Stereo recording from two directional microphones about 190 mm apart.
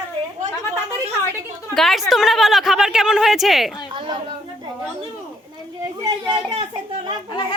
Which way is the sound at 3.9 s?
25° right (ahead or behind).